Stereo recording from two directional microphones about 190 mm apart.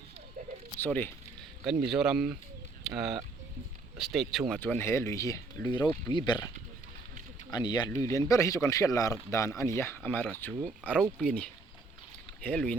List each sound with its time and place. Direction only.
0.4 s a sound: 45° right (ahead or behind)
0.8 s speech: 10° left (ahead or behind)
1.9 s speech: 5° right (ahead or behind)
4.6 s speech: 10° left (ahead or behind)
7.5 s speech: 20° left (ahead or behind); by 12.7 s 5° left (ahead or behind)